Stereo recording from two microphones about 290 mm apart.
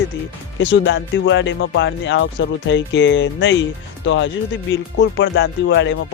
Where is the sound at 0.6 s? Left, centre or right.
Left.